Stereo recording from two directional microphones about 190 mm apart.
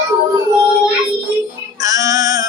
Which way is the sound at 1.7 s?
15° right (ahead or behind).